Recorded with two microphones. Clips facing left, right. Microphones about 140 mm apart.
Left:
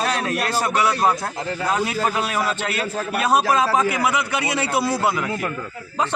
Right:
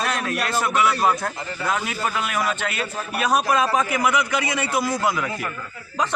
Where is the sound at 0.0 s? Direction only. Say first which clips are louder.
Left 2 dB; 35° left (ahead or behind).